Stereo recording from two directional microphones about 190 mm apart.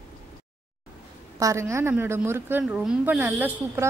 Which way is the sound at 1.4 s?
15° right (ahead or behind).